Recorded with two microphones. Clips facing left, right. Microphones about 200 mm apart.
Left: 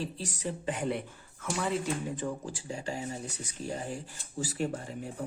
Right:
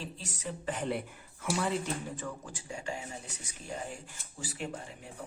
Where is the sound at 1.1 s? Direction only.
10° right (ahead or behind).